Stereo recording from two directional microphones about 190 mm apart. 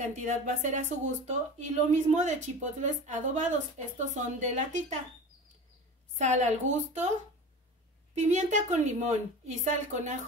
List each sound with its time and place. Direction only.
0.0 s speech: 40° right (ahead or behind)
6.1 s speech: 40° right (ahead or behind)
8.1 s speech: 35° right (ahead or behind)